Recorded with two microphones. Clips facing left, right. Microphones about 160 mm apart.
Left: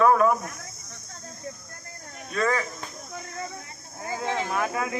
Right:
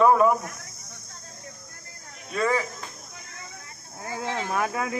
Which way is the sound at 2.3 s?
10° right (ahead or behind).